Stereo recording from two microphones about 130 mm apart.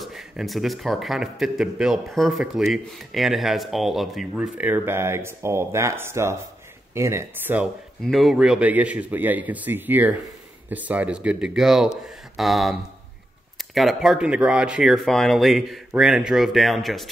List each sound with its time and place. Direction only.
0.0 s speech: centre (ahead or behind); by 7.6 s 15° right (ahead or behind)
8.0 s a man's voice: centre (ahead or behind)